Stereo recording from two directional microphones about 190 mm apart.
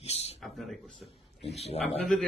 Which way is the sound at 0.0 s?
35° left (ahead or behind).